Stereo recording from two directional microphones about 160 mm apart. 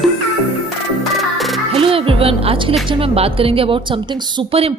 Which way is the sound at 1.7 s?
35° right (ahead or behind).